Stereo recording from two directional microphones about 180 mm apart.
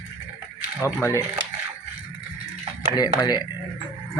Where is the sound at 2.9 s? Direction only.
20° left (ahead or behind).